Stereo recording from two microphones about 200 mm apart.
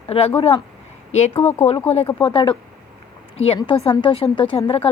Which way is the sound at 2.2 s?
25° left (ahead or behind).